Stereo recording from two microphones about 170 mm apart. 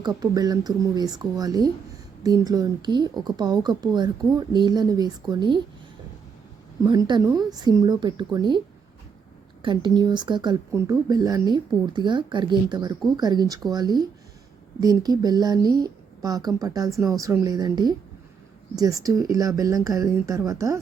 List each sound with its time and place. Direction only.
0.0 s speech: 20° right (ahead or behind)
6.8 s speech: 25° right (ahead or behind)